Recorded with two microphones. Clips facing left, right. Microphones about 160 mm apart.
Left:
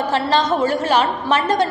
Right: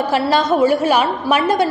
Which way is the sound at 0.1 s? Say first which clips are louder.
Right 2 dB; 10° right (ahead or behind).